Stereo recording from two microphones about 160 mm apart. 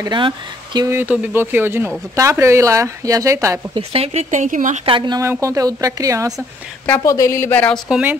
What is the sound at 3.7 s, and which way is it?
Speech, 35° right (ahead or behind).